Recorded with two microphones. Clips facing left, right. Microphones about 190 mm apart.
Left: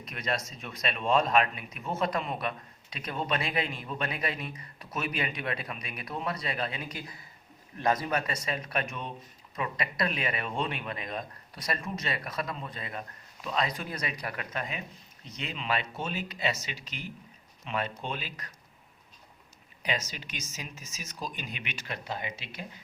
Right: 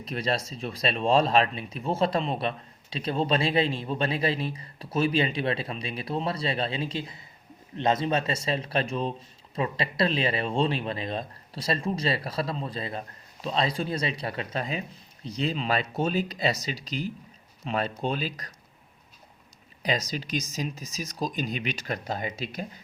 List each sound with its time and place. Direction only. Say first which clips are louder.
0.0 s speech: right 5 dB; 30° right (ahead or behind)
19.8 s speech: right 5 dB; 35° right (ahead or behind)